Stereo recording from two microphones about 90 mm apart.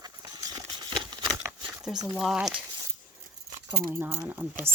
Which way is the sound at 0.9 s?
50° right (ahead or behind).